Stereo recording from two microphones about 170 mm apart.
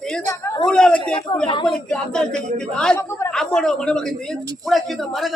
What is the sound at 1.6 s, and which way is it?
A man's voice, 5° left (ahead or behind).